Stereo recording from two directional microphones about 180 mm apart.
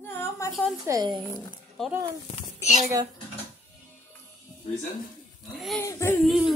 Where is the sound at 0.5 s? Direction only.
Centre (ahead or behind).